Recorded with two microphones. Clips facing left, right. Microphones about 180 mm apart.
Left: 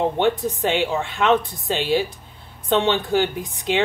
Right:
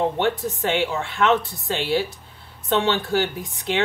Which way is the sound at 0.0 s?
20° left (ahead or behind).